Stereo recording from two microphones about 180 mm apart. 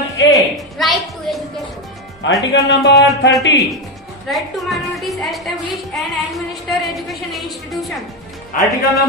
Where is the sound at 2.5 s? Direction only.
70° left (ahead or behind).